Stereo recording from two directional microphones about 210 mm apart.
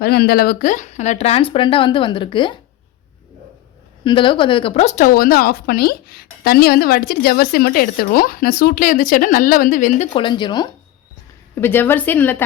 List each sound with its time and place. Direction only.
0.0 s speech: 50° left (ahead or behind); by 2.6 s 25° left (ahead or behind)
4.0 s speech: 25° left (ahead or behind)
11.5 s a woman's voice: 10° left (ahead or behind)